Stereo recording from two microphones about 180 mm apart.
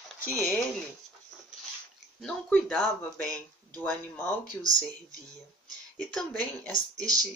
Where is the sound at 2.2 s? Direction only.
5° left (ahead or behind).